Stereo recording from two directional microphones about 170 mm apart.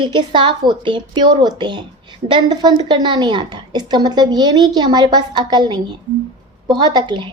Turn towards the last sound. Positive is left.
turn(degrees=-25)  # may be behind; listen again after turning